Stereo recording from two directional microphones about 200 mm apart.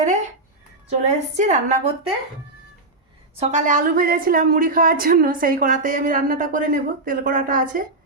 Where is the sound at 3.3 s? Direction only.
35° right (ahead or behind).